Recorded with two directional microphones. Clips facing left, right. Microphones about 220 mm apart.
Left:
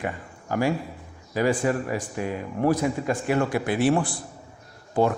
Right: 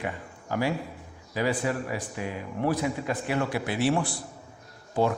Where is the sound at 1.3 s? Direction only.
50° left (ahead or behind).